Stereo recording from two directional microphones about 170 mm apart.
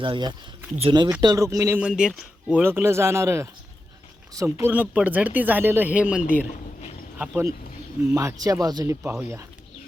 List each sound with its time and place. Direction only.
0.0 s speech: 25° right (ahead or behind); by 6.2 s 5° right (ahead or behind)
8.1 s speech: 20° right (ahead or behind)